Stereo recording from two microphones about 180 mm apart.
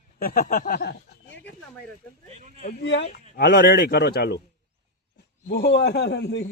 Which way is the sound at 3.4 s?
70° left (ahead or behind).